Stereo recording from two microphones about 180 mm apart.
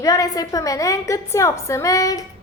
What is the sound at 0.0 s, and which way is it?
A woman's voice, 20° left (ahead or behind).